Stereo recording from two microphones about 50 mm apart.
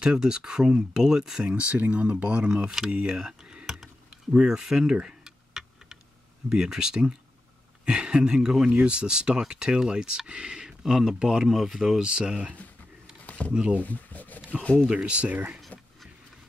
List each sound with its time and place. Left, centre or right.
0.0 s speech: centre
3.6 s a sound: centre
4.3 s speech: centre
5.0 s typing: centre
6.5 s speech: centre
8.6 s speech: right; by 12.0 s centre
12.0 s speech: centre
13.2 s a sound: left
13.5 s speech: right
13.7 s speech: left
14.9 s speech: right